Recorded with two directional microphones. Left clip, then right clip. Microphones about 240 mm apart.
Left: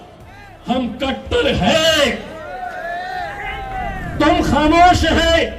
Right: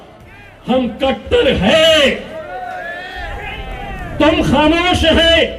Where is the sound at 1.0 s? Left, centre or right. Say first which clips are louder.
Right 4 dB; left.